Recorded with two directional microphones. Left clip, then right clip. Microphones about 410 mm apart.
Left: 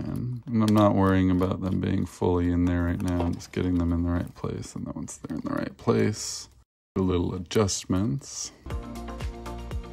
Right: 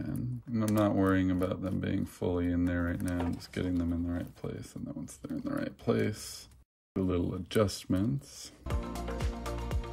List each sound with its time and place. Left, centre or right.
0.0 s typing: centre
0.8 s speech: centre
9.2 s music: centre